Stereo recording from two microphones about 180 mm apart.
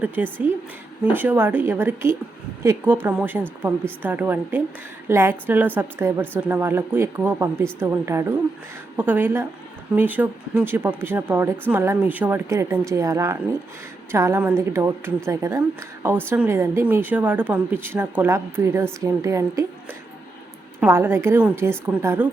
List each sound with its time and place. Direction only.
0.2 s a woman's voice: 10° right (ahead or behind)